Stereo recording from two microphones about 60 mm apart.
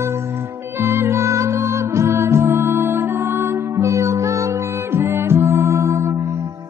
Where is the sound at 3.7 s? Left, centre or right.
Right.